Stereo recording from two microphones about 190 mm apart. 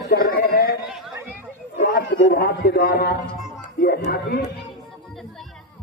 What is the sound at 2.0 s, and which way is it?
Speech, 70° left (ahead or behind).